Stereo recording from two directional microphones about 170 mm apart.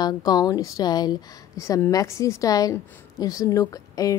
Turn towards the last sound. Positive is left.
turn(degrees=20)  # may be behind; listen again after turning